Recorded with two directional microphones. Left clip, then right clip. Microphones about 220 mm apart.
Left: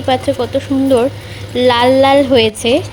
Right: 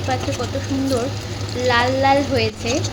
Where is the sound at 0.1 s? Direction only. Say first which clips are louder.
Left 6 dB; 40° left (ahead or behind).